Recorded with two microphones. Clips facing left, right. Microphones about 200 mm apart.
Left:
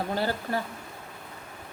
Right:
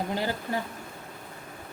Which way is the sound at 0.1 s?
15° right (ahead or behind).